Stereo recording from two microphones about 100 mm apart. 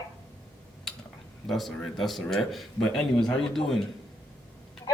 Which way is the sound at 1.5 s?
Centre (ahead or behind).